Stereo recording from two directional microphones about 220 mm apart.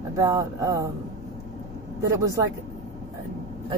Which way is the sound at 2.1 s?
15° right (ahead or behind).